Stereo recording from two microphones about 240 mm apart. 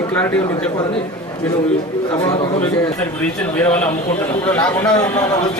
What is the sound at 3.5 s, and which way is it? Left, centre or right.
A man's voice, centre.